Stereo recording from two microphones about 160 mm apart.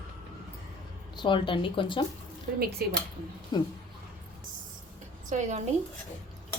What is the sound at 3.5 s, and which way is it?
Speech, 25° left (ahead or behind).